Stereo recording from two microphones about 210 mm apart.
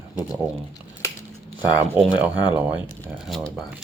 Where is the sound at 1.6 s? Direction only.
5° right (ahead or behind).